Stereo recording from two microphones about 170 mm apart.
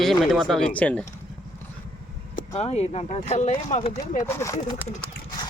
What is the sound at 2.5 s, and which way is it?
Speech, 40° left (ahead or behind).